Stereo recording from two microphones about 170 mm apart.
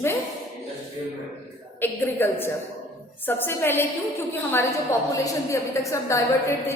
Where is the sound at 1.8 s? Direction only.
10° left (ahead or behind).